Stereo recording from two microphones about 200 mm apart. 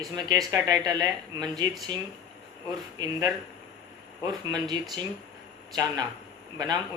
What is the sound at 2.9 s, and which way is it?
Speech, 20° right (ahead or behind).